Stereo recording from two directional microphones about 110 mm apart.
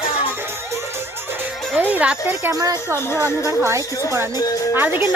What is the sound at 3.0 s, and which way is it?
Speech, 20° left (ahead or behind).